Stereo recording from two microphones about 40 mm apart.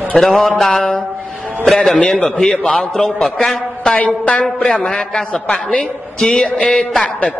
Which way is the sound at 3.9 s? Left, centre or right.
Left.